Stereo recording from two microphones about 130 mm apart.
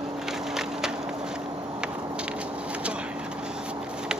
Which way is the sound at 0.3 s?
5° right (ahead or behind).